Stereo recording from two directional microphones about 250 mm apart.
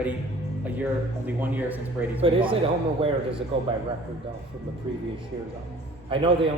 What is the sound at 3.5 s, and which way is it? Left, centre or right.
Speech, right.